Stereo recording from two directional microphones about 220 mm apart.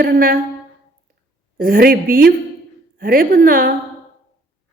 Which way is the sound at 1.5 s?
40° right (ahead or behind).